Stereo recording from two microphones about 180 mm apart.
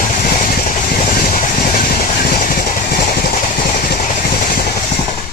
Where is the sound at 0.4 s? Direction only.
50° left (ahead or behind).